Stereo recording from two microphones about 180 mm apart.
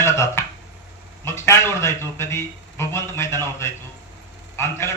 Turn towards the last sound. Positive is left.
turn(degrees=15)  # may be behind; listen again after turning